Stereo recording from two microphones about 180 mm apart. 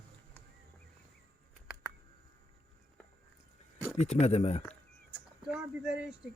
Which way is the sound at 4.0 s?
40° left (ahead or behind).